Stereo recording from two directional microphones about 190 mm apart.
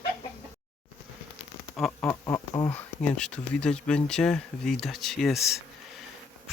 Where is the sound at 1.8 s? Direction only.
Centre (ahead or behind).